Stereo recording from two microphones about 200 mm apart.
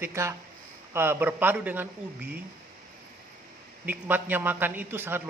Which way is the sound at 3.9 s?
10° right (ahead or behind).